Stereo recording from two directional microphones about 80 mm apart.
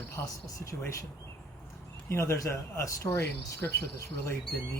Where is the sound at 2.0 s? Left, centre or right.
Left.